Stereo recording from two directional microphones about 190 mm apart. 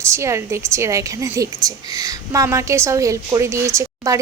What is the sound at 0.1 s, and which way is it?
A woman's voice, 15° right (ahead or behind).